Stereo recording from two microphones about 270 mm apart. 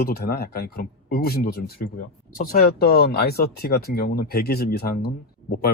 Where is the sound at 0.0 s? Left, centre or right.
Left.